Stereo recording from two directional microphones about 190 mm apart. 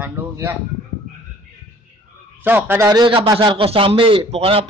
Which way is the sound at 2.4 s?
10° right (ahead or behind).